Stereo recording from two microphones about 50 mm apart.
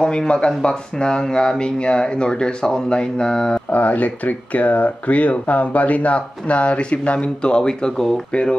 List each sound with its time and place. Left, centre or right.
0.0 s speech: centre
3.7 s speech: left; by 8.4 s centre